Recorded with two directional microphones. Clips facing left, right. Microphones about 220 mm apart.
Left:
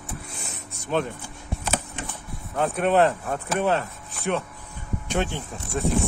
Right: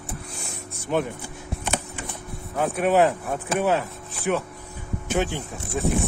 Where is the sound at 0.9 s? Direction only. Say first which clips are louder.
Right 1 dB; 15° right (ahead or behind).